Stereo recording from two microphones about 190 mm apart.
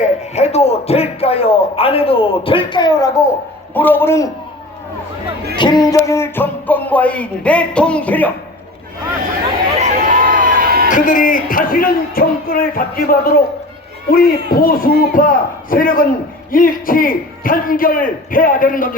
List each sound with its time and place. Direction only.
0.0 s a man's voice: 35° left (ahead or behind); by 3.2 s 20° left (ahead or behind)
3.8 s music: 10° left (ahead or behind)
5.5 s music: 25° left (ahead or behind); by 8.3 s 10° left (ahead or behind)
9.8 s a sound: 45° right (ahead or behind)
10.8 s speech: 45° left (ahead or behind)